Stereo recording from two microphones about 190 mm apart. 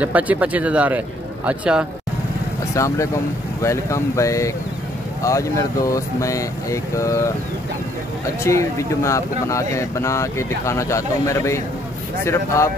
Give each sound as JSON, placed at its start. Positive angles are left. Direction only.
{"t": 0.0, "sound": "a man's voice", "side_deg": -10}
{"t": 2.7, "sound": "speech", "side_deg": 15}
{"t": 8.5, "sound": "speech", "side_deg": 15}